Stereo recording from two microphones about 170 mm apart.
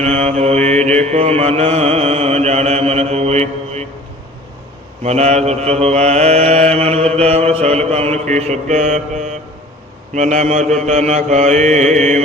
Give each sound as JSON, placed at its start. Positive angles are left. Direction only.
{"t": 0.0, "sound": "mantra", "side_deg": -40}
{"t": 5.0, "sound": "mantra", "side_deg": -40}